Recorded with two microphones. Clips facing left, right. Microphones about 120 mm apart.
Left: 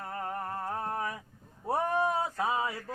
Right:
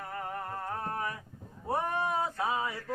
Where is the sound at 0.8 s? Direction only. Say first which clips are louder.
Left 1 dB; 25° left (ahead or behind).